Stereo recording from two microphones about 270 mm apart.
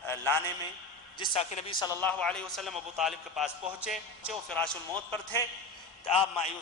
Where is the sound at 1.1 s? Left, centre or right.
Centre.